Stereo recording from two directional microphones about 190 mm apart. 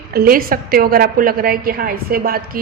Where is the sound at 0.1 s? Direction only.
50° right (ahead or behind).